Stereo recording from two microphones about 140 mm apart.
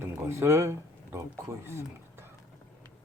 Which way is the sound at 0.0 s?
20° right (ahead or behind).